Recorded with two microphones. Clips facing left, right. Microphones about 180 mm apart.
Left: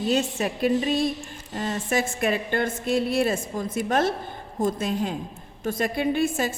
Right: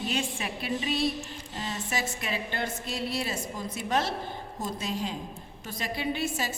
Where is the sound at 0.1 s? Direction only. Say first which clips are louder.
Left 8 dB; 40° left (ahead or behind).